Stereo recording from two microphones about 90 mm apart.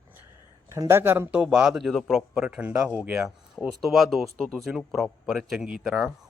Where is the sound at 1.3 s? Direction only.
10° right (ahead or behind).